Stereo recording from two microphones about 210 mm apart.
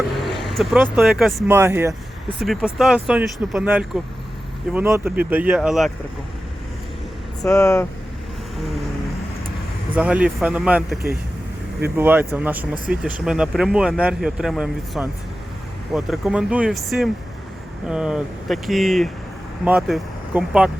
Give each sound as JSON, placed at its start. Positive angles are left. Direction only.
{"t": 0.1, "sound": "speech", "side_deg": 0}
{"t": 7.4, "sound": "speech", "side_deg": 15}
{"t": 9.9, "sound": "speech", "side_deg": -5}